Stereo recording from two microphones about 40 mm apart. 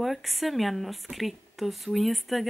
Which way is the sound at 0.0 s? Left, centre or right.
Centre.